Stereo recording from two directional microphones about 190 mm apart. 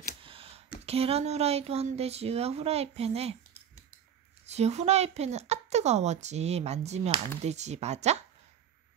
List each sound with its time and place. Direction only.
0.2 s a sound: 30° right (ahead or behind)
0.8 s speech: 30° right (ahead or behind)
4.5 s speech: 35° right (ahead or behind)